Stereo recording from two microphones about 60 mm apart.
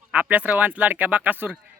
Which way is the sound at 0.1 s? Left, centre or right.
Right.